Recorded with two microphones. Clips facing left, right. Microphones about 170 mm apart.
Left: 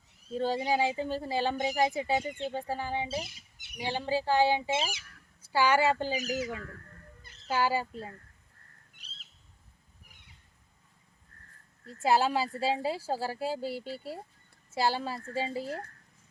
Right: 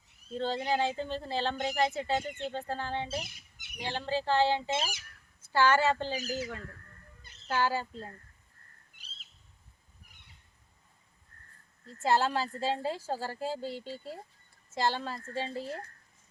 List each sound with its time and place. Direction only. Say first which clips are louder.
0.3 s speech: left 2 dB; 10° left (ahead or behind)
6.2 s speech: left 3 dB; 30° right (ahead or behind)
7.4 s speech: left 2 dB; 10° left (ahead or behind)
11.9 s speech: left 2 dB; 10° left (ahead or behind)